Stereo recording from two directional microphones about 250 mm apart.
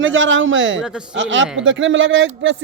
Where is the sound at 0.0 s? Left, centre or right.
Right.